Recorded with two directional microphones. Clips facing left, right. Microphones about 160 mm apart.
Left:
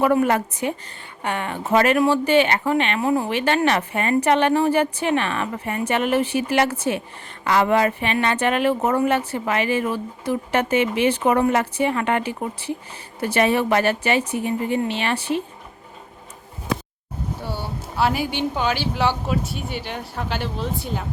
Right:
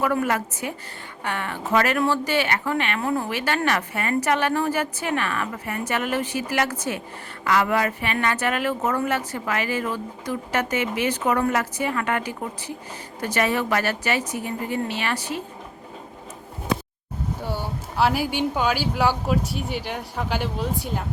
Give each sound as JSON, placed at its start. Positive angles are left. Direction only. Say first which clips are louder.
{"t": 0.0, "sound": "speech", "louder": "left 5 dB", "side_deg": 25}
{"t": 1.2, "sound": "speech", "louder": "left 3 dB", "side_deg": 20}
{"t": 11.3, "sound": "speech", "louder": "left 1 dB", "side_deg": 25}
{"t": 17.4, "sound": "speech", "louder": "even", "side_deg": -15}